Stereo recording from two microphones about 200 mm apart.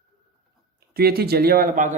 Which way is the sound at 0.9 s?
50° right (ahead or behind).